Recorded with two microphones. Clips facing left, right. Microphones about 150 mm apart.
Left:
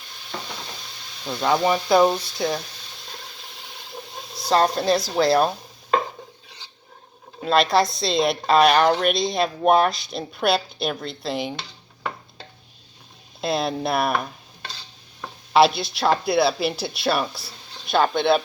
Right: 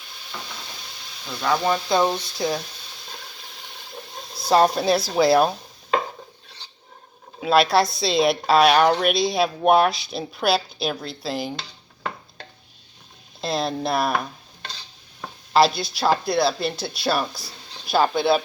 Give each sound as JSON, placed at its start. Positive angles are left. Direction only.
{"t": 1.3, "sound": "frying", "side_deg": 20}
{"t": 1.6, "sound": "speech", "side_deg": 10}
{"t": 4.4, "sound": "speech", "side_deg": -10}
{"t": 7.4, "sound": "speech", "side_deg": -5}
{"t": 13.4, "sound": "speech", "side_deg": 0}